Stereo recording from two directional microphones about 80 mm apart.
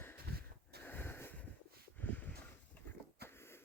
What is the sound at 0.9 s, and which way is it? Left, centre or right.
Wheeze, left.